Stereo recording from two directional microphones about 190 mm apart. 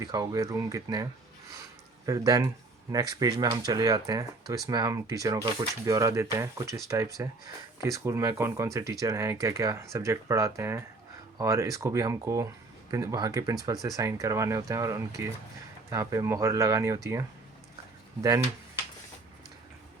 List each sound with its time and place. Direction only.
0.0 s speech: 20° right (ahead or behind)
2.0 s speech: 20° right (ahead or behind)